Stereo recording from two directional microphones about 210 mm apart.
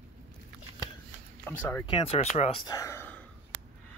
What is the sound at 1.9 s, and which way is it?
Speech, 25° left (ahead or behind).